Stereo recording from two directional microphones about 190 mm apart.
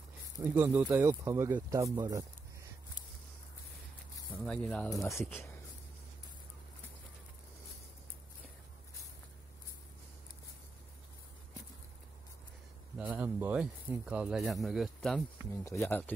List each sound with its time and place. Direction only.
0.4 s speech: 10° right (ahead or behind)
4.5 s speech: 5° left (ahead or behind)
4.8 s speech: 15° left (ahead or behind)
5.2 s speech: centre (ahead or behind)
12.9 s speech: 10° right (ahead or behind)
15.5 s speech: 15° left (ahead or behind)